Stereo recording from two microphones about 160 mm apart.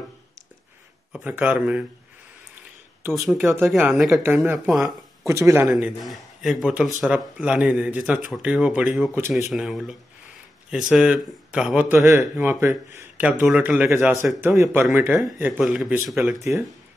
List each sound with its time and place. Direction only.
1.1 s speech: 10° right (ahead or behind)
3.7 s a man's voice: 5° right (ahead or behind)
5.2 s a man's voice: 20° right (ahead or behind)
15.5 s a man's voice: centre (ahead or behind)
16.3 s speech: 20° right (ahead or behind)